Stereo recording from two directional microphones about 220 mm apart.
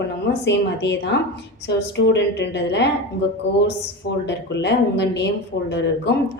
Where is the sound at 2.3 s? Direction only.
50° left (ahead or behind).